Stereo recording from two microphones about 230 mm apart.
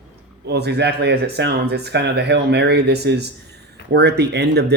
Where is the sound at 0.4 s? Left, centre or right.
Right.